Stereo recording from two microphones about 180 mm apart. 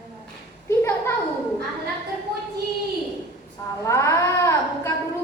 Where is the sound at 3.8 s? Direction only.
15° left (ahead or behind).